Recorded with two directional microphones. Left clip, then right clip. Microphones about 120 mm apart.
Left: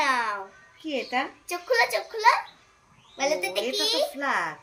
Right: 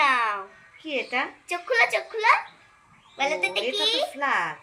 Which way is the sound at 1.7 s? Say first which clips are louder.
Right 1 dB; 45° left (ahead or behind).